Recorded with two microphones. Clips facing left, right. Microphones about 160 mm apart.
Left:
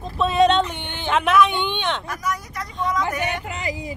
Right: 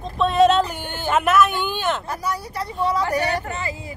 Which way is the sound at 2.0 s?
30° right (ahead or behind).